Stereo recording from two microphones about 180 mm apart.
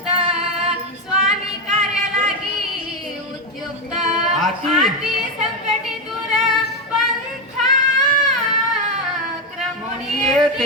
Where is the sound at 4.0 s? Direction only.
Centre (ahead or behind).